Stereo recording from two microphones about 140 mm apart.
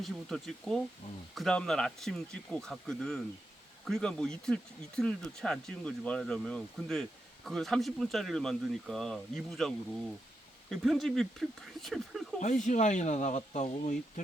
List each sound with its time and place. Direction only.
0.0 s speech: centre (ahead or behind)
12.4 s speech: 60° left (ahead or behind)